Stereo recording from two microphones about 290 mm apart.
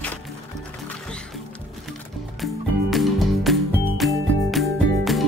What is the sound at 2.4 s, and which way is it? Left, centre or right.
Music, centre.